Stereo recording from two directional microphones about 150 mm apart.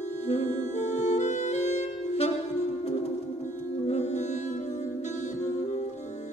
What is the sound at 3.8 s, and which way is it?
Music, 50° left (ahead or behind).